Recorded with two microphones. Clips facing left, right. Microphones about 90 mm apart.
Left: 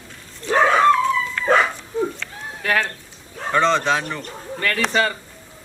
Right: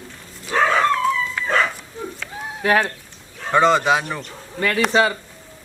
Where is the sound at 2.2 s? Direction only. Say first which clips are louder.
Right 1 dB; 5° right (ahead or behind).